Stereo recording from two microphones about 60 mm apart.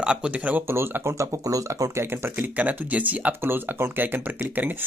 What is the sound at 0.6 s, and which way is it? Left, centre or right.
Speech, right.